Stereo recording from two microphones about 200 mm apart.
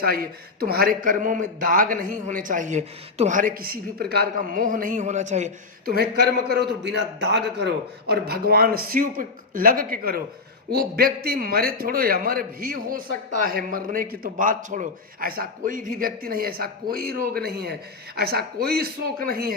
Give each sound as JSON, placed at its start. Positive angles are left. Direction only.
{"t": 0.0, "sound": "a man's voice", "side_deg": -50}